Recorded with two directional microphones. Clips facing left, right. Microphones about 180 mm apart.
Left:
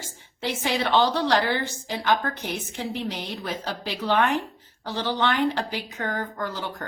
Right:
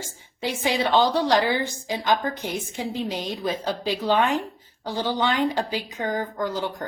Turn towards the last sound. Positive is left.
turn(degrees=-15)  # may be behind; listen again after turning